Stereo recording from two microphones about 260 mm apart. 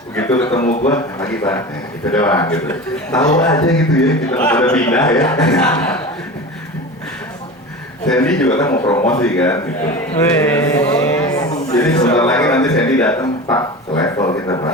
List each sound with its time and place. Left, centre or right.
0.2 s a man's voice: centre
0.6 s a man's voice: left
0.9 s a man's voice: centre
8.1 s a man's voice: centre